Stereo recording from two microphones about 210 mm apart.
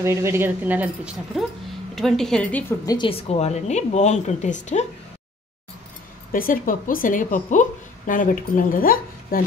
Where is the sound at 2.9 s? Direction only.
25° left (ahead or behind).